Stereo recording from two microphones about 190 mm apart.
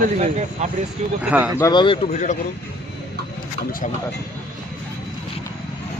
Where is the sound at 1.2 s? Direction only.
10° right (ahead or behind).